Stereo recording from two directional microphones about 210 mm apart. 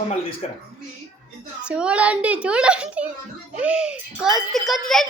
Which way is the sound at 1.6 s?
5° right (ahead or behind).